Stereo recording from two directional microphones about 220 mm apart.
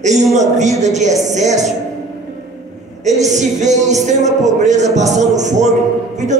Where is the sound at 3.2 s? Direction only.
30° right (ahead or behind).